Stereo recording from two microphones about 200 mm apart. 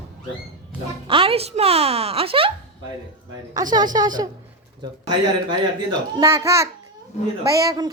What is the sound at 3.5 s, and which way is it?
Speech, 20° right (ahead or behind).